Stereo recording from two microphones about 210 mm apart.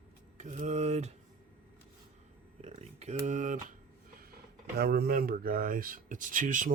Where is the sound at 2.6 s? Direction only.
30° right (ahead or behind).